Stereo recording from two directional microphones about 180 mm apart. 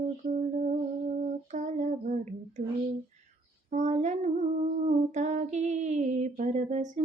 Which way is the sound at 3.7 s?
40° right (ahead or behind).